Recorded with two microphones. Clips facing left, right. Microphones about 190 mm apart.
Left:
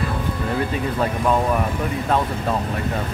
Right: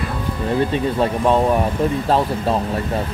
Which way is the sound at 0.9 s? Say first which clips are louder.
Right 3 dB; 25° right (ahead or behind).